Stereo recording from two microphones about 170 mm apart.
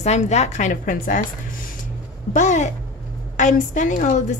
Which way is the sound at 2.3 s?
45° left (ahead or behind).